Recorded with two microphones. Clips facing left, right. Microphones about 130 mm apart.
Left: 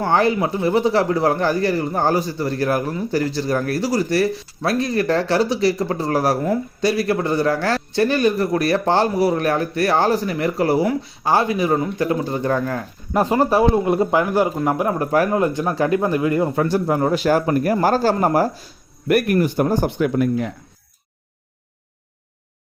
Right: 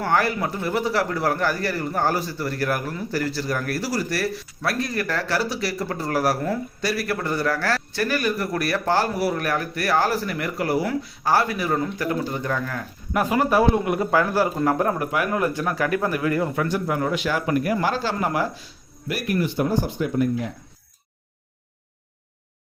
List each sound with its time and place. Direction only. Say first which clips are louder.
0.0 s speech: left 5 dB; 25° left (ahead or behind)
14.9 s speech: left 6 dB; 35° left (ahead or behind)
16.6 s speech: left 5 dB; 35° left (ahead or behind)
19.0 s speech: left 8 dB; 55° left (ahead or behind)
20.0 s speech: left 4 dB; 85° left